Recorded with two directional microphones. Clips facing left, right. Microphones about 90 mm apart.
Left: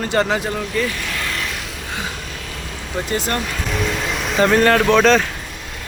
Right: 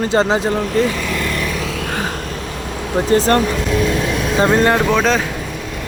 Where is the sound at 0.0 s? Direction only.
20° right (ahead or behind).